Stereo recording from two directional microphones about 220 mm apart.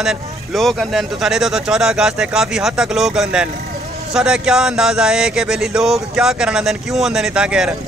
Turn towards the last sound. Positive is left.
turn(degrees=-5)  # may be behind; listen again after turning